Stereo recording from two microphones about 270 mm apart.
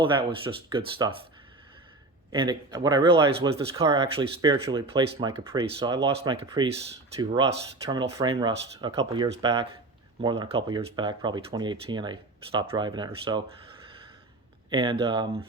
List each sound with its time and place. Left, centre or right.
0.0 s speech: centre
2.3 s speech: centre
14.7 s speech: centre